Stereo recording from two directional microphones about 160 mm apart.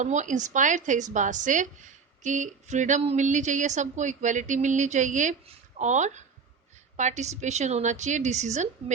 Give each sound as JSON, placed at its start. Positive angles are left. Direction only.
{"t": 0.0, "sound": "speech", "side_deg": -50}